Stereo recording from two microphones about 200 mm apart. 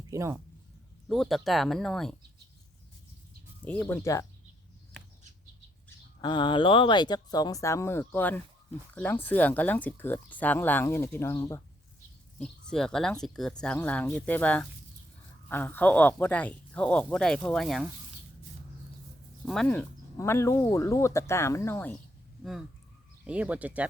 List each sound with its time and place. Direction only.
0.1 s speech: 15° right (ahead or behind)
1.0 s speech: centre (ahead or behind)
3.6 s speech: 10° left (ahead or behind)
6.2 s speech: 25° left (ahead or behind)
12.4 s speech: 5° left (ahead or behind)
19.5 s speech: 5° left (ahead or behind)
23.2 s speech: 5° right (ahead or behind)